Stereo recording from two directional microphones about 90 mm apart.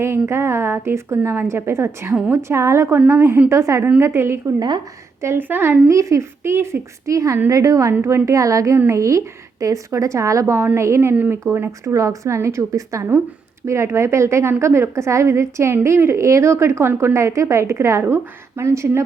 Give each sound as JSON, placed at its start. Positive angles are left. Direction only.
{"t": 0.0, "sound": "a woman's voice", "side_deg": -30}
{"t": 3.5, "sound": "a woman's voice", "side_deg": -35}
{"t": 5.9, "sound": "a woman's voice", "side_deg": -35}
{"t": 11.1, "sound": "a woman's voice", "side_deg": -20}